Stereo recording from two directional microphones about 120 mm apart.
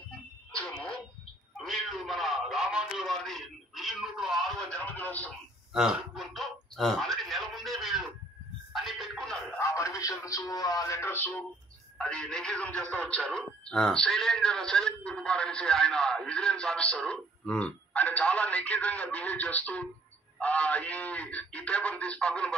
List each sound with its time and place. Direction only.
0.5 s speech: 10° left (ahead or behind)
4.6 s a man's voice: 10° left (ahead or behind)
5.7 s a sound: 5° right (ahead or behind)
8.7 s music: centre (ahead or behind)
9.6 s speech: 25° left (ahead or behind)
12.0 s a man's voice: 10° left (ahead or behind)